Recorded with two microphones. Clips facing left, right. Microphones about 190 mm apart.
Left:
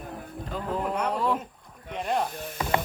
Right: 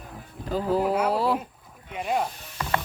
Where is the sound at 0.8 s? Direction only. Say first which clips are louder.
Right 5 dB; 5° right (ahead or behind).